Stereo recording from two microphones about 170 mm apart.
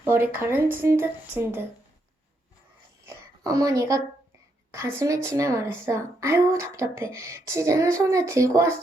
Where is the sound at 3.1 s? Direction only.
20° right (ahead or behind).